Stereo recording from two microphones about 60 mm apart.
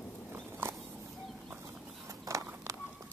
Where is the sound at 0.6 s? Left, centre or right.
Right.